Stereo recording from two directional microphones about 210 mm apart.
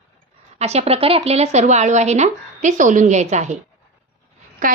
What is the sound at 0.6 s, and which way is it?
A woman's voice, 30° right (ahead or behind).